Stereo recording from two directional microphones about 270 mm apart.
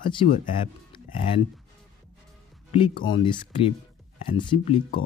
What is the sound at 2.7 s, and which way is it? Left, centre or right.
Speech, centre.